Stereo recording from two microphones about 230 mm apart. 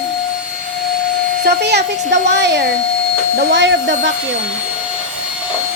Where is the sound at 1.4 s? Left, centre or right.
Right.